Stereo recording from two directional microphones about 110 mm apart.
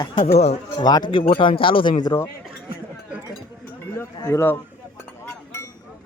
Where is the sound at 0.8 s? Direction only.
40° left (ahead or behind).